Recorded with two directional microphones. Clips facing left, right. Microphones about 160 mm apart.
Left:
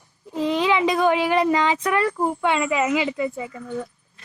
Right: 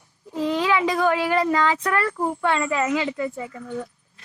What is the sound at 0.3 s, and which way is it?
Speech, 20° left (ahead or behind).